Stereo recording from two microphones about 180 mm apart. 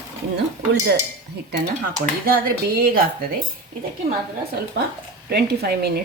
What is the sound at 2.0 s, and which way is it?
Speech, 50° right (ahead or behind).